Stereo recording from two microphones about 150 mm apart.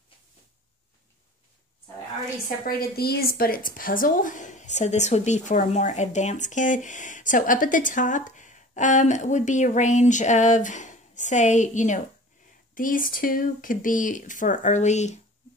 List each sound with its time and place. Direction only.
2.4 s a woman's voice: 85° left; by 15.1 s 50° left (ahead or behind)